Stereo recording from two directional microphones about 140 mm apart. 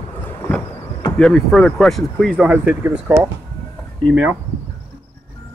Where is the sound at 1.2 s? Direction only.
5° left (ahead or behind).